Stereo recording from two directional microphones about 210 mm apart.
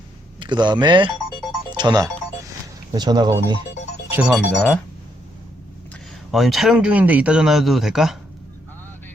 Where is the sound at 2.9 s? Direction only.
20° right (ahead or behind).